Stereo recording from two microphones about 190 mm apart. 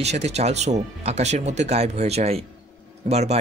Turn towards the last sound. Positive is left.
turn(degrees=-35)  # may be behind; listen again after turning